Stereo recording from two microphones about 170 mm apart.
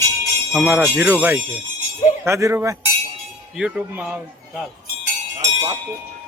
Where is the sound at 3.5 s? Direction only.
5° right (ahead or behind).